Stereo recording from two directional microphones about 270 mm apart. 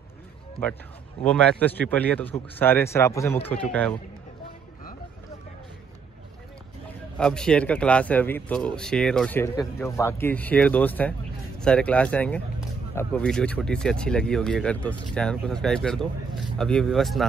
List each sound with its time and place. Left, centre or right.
1.2 s a man's voice: centre
7.2 s speech: centre